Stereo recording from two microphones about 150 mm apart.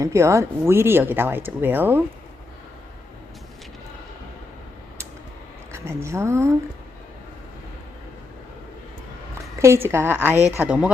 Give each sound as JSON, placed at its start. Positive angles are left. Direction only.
{"t": 0.0, "sound": "speech", "side_deg": -20}
{"t": 5.7, "sound": "a woman's voice", "side_deg": -15}
{"t": 9.6, "sound": "speech", "side_deg": -15}